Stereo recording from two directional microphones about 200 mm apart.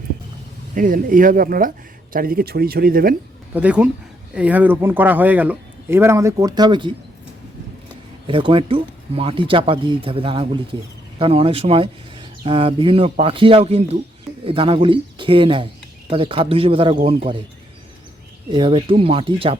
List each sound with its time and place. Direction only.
0.7 s speech: 40° right (ahead or behind)
3.5 s speech: 5° right (ahead or behind); by 6.9 s 25° right (ahead or behind)
8.3 s speech: 25° right (ahead or behind)
18.5 s speech: 25° right (ahead or behind)